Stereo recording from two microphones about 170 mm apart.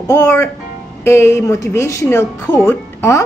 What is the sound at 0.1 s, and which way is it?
Speech, 15° left (ahead or behind).